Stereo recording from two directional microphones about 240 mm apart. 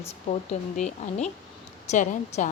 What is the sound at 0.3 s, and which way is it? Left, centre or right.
A woman's voice, left.